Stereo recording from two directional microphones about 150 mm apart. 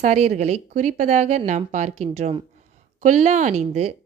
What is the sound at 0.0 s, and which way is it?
Speech, 50° right (ahead or behind).